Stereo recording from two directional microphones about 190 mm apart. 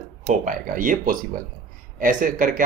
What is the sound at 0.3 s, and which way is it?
Speech, 45° right (ahead or behind).